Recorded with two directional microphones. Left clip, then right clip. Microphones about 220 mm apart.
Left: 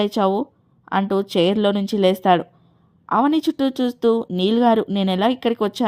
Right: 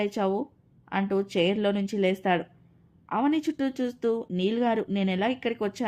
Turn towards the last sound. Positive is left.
turn(degrees=30)  # may be behind; listen again after turning